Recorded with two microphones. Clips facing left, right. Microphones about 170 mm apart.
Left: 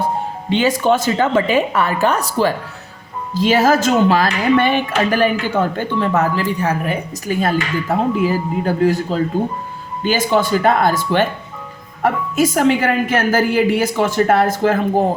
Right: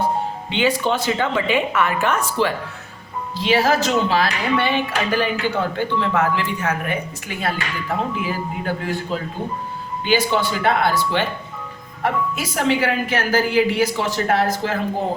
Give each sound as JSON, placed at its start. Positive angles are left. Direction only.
{"t": 0.5, "sound": "a woman's voice", "side_deg": 45}